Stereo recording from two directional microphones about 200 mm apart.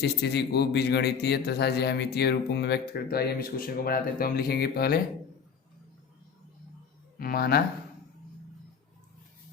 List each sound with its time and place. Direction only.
0.0 s a man's voice: 55° left (ahead or behind)
7.2 s speech: 50° left (ahead or behind)